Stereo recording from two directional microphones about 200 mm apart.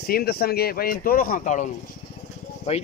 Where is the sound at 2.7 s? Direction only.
30° left (ahead or behind).